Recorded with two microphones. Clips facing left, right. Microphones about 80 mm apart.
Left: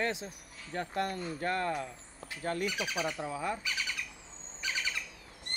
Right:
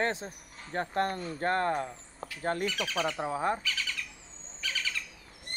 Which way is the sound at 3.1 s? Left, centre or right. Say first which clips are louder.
Right 5 dB; right.